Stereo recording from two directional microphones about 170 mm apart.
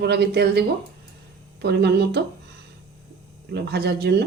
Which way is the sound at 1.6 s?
75° right (ahead or behind).